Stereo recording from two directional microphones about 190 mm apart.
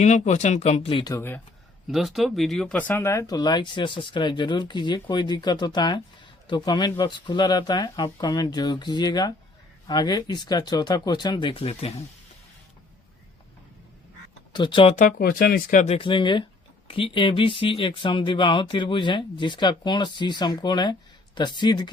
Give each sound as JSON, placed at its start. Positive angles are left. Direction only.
{"t": 0.0, "sound": "speech", "side_deg": 35}
{"t": 1.9, "sound": "speech", "side_deg": 0}
{"t": 14.5, "sound": "speech", "side_deg": 25}
{"t": 14.9, "sound": "speech", "side_deg": 45}
{"t": 16.0, "sound": "speech", "side_deg": 25}